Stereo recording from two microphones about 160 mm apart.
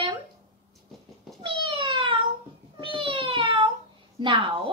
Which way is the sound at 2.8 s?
30° right (ahead or behind).